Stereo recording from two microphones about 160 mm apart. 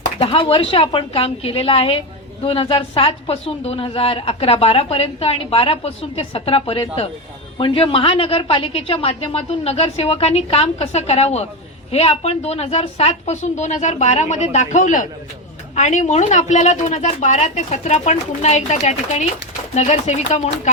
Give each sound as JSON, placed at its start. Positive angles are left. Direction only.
{"t": 0.2, "sound": "a woman's voice", "side_deg": 35}